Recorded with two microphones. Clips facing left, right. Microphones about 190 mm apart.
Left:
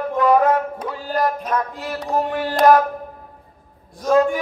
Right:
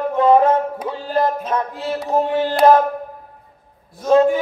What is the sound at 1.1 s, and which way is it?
A man's voice, 25° right (ahead or behind).